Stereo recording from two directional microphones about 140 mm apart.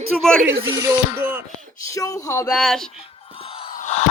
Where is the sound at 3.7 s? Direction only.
55° left (ahead or behind).